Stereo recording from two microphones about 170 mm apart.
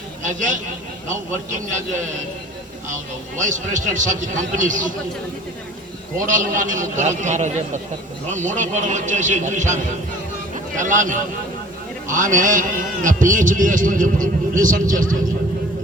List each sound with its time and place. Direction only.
0.2 s speech: 50° right (ahead or behind)
3.4 s a man's voice: 45° right (ahead or behind)
6.1 s a man's voice: 50° right (ahead or behind)